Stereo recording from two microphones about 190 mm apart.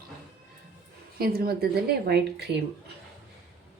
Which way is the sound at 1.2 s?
55° right (ahead or behind).